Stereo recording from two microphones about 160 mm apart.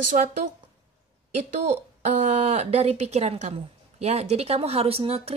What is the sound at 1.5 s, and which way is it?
Speech, 50° right (ahead or behind).